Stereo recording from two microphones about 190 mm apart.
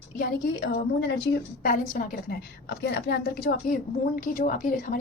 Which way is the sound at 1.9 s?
50° left (ahead or behind).